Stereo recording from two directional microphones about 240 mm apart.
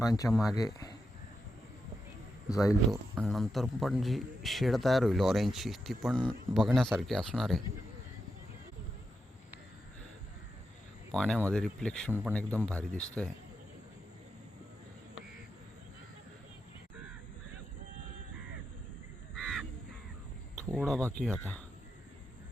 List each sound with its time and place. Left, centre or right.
0.0 s speech: centre
2.5 s speech: centre
3.2 s speech: centre
11.1 s speech: centre
20.7 s speech: centre